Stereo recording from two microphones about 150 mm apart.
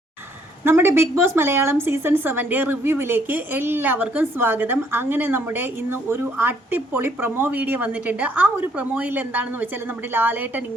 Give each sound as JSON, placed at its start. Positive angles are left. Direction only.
{"t": 0.6, "sound": "a woman's voice", "side_deg": -15}